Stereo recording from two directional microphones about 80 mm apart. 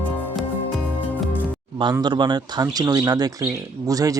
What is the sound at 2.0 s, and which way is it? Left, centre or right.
Speech, right.